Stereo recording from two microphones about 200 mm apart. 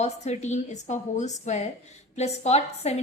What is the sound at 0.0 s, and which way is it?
A woman's voice, 35° left (ahead or behind).